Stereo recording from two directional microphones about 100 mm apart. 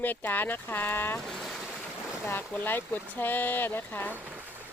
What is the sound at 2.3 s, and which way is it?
Speech, 20° left (ahead or behind).